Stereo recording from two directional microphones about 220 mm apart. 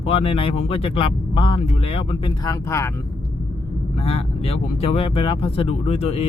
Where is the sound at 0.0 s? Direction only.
25° left (ahead or behind).